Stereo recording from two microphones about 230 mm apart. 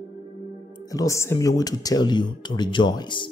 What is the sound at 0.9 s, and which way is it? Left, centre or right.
Speech, centre.